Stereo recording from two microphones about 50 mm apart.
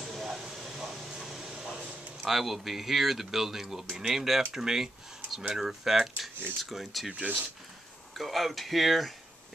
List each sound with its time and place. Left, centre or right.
0.0 s a sound: centre
2.2 s speech: centre
7.1 s speech: right
8.1 s speech: centre